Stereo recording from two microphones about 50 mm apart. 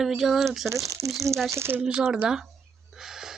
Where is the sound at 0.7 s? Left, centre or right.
Right.